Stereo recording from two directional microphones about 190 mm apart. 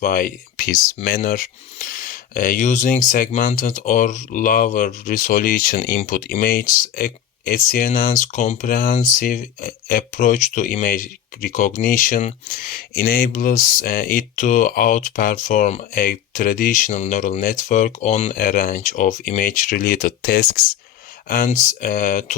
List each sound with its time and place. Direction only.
0.0 s speech: 45° left (ahead or behind)
16.0 s speech: 50° left (ahead or behind); by 18.3 s 35° left (ahead or behind)
18.3 s speech: 50° left (ahead or behind)